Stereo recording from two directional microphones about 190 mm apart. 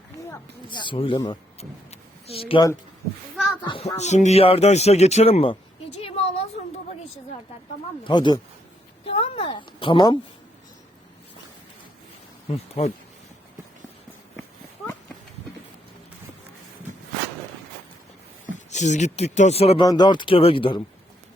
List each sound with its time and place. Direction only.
0.3 s speech: 25° left (ahead or behind)
1.9 s a sound: 30° left (ahead or behind)
3.3 s speech: 5° left (ahead or behind)
3.7 s speech: 30° left (ahead or behind)
8.0 s a woman's voice: 25° left (ahead or behind)
12.5 s speech: 35° left (ahead or behind)
18.4 s speech: 40° left (ahead or behind)
19.8 s speech: 20° left (ahead or behind)